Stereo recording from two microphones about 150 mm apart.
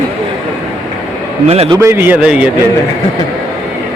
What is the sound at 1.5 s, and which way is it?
Speech, 40° right (ahead or behind).